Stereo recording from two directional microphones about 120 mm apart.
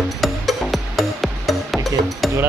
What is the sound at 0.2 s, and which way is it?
Music, centre (ahead or behind).